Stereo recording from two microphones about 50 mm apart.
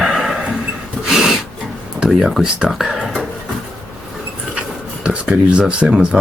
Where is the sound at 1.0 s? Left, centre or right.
Centre.